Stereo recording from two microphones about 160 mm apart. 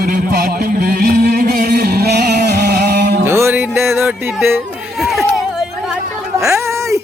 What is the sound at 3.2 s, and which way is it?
Music, 15° right (ahead or behind).